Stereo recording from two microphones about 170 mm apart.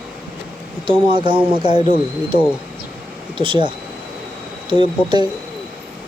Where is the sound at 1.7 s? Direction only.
35° left (ahead or behind).